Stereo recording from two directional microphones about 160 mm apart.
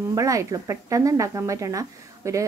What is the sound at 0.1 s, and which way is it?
Speech, 20° right (ahead or behind).